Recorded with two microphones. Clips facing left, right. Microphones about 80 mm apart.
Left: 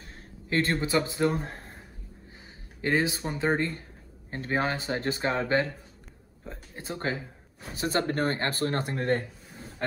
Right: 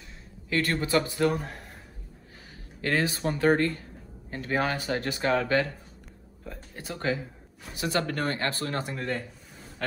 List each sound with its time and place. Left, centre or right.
0.5 s speech: left
2.8 s speech: centre
4.3 s speech: left
9.8 s speech: left